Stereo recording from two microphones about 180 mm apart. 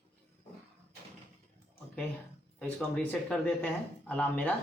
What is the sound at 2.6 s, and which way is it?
Speech, 5° left (ahead or behind).